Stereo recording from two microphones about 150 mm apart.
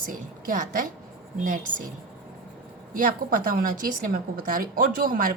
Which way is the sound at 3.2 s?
65° right (ahead or behind).